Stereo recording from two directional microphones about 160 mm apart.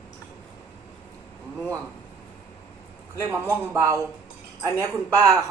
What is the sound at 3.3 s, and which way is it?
Speech, 15° right (ahead or behind).